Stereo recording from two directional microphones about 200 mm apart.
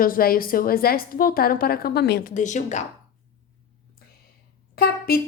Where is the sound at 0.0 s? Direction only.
45° left (ahead or behind).